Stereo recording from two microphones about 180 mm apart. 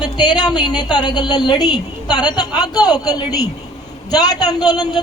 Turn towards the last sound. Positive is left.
turn(degrees=20)  # may be behind; listen again after turning